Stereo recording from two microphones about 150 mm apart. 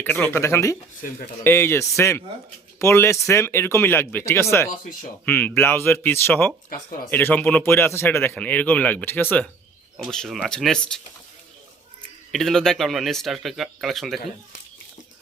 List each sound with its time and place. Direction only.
0.0 s speech: 10° left (ahead or behind)
12.3 s speech: centre (ahead or behind)